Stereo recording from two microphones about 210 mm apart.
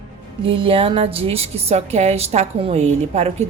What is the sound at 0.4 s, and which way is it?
A woman's voice, 25° right (ahead or behind).